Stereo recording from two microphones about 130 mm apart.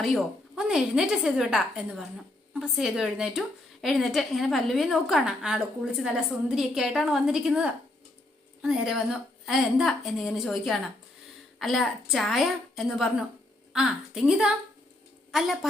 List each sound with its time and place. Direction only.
0.0 s a woman's voice: centre (ahead or behind)